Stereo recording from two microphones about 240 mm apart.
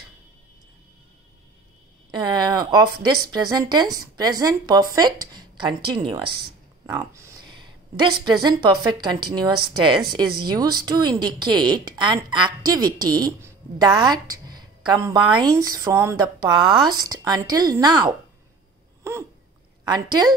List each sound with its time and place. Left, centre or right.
2.0 s a sound: centre
3.3 s a woman's voice: centre
6.2 s speech: right
6.9 s a sound: centre
8.3 s a woman's voice: centre
19.8 s a woman's voice: centre